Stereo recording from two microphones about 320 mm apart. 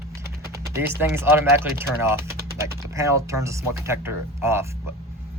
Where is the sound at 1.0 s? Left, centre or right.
Centre.